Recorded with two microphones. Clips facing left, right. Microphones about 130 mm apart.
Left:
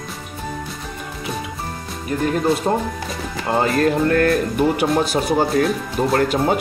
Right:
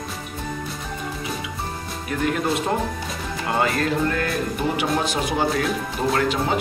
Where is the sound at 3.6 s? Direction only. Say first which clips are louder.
Left 5 dB; 40° left (ahead or behind); by 4.9 s 55° left (ahead or behind).